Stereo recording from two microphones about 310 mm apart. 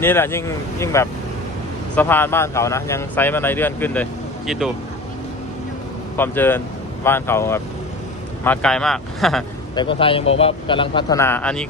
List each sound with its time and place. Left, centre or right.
0.0 s speech: centre
6.1 s speech: centre
9.7 s speech: centre